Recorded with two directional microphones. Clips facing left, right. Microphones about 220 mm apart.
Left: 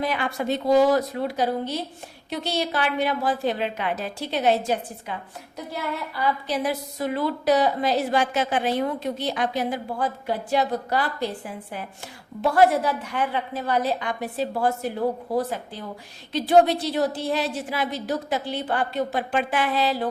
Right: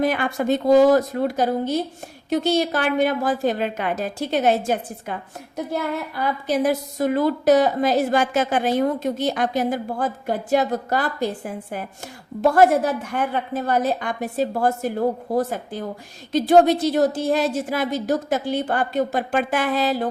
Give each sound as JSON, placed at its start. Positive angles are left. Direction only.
{"t": 0.0, "sound": "a woman's voice", "side_deg": -50}